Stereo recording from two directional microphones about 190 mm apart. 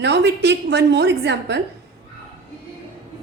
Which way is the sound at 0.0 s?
65° right (ahead or behind).